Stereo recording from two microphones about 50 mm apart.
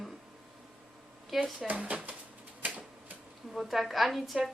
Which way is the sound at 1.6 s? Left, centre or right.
Right.